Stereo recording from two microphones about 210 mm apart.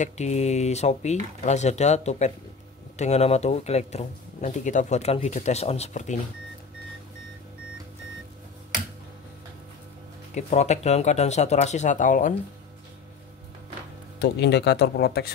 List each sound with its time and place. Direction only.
0.0 s speech: 35° left (ahead or behind)
10.3 s speech: 30° left (ahead or behind)
14.2 s speech: 55° left (ahead or behind)